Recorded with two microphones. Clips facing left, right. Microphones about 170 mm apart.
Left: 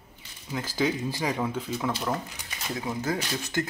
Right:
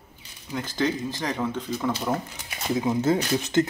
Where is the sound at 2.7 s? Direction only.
25° right (ahead or behind).